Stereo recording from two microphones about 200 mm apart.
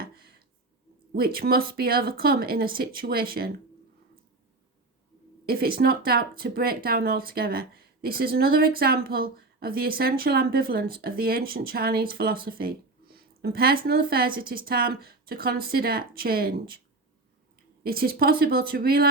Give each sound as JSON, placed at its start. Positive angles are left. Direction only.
{"t": 0.0, "sound": "a sound", "side_deg": -50}
{"t": 1.1, "sound": "speech", "side_deg": -50}
{"t": 5.5, "sound": "speech", "side_deg": -50}
{"t": 17.8, "sound": "speech", "side_deg": -50}